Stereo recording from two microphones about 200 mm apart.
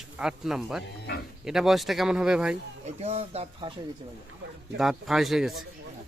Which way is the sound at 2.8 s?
30° right (ahead or behind).